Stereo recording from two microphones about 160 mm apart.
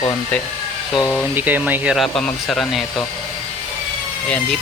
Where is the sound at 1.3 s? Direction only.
10° right (ahead or behind).